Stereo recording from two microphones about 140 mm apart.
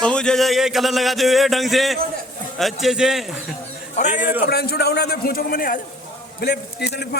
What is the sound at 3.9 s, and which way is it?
Speech, 55° left (ahead or behind).